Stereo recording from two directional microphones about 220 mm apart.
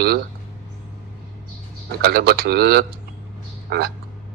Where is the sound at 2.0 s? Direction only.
45° right (ahead or behind).